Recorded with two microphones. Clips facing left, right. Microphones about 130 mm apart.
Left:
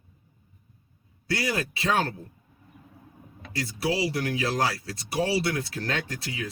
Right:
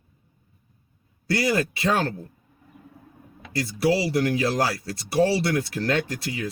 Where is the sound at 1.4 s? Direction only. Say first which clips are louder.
Right 7 dB; 40° right (ahead or behind).